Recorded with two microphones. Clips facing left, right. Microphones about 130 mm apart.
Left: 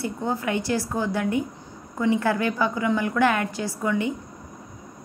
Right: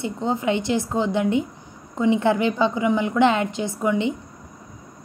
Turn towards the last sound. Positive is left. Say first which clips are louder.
# right 3 dB
turn(degrees=-20)  # may be behind; listen again after turning